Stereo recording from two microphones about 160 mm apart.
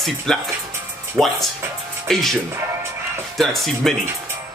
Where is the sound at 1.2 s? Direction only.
10° right (ahead or behind).